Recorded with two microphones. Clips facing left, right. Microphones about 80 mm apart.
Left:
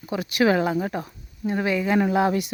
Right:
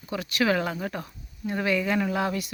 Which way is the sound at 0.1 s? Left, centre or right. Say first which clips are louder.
Left 4 dB; centre.